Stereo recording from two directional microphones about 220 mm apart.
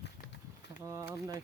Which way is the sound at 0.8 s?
15° right (ahead or behind).